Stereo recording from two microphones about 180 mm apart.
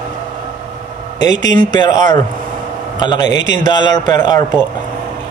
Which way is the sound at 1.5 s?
45° right (ahead or behind).